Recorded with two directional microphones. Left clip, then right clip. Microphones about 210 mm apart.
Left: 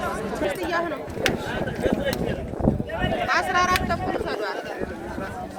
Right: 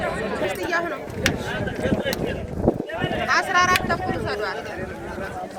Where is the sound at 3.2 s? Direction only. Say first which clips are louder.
Right 3 dB; 20° left (ahead or behind).